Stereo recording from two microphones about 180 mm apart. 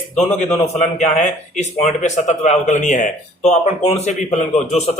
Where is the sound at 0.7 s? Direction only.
40° left (ahead or behind).